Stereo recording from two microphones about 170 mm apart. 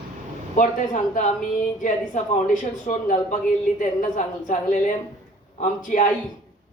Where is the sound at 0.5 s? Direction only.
45° left (ahead or behind).